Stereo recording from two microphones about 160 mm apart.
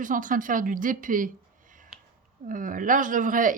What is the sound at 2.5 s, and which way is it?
A woman's voice, 55° right (ahead or behind).